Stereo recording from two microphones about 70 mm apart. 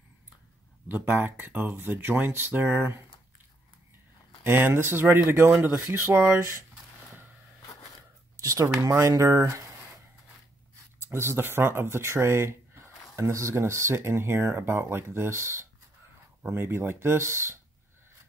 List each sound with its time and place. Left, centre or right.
0.8 s speech: right
4.4 s speech: right
8.4 s a sound: right
9.1 s speech: right
11.1 s speech: right